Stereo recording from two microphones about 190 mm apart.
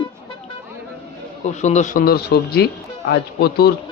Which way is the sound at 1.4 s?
35° left (ahead or behind).